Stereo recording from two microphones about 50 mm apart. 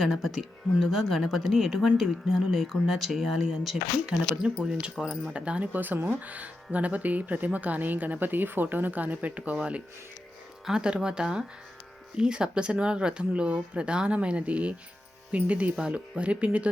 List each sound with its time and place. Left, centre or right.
0.0 s speech: centre
4.6 s speech: centre
5.7 s speech: right
9.4 s speech: right